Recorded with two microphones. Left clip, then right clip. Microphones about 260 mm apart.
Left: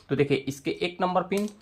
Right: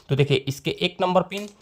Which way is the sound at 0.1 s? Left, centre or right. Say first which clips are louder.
Right 2 dB; right.